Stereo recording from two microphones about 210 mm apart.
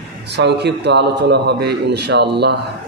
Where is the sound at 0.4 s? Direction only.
55° right (ahead or behind).